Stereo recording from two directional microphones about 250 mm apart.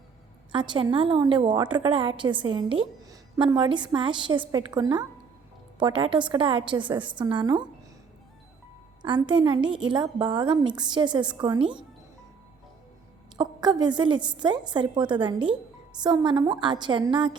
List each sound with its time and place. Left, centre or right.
0.5 s a woman's voice: centre
9.0 s a woman's voice: centre
13.4 s a woman's voice: centre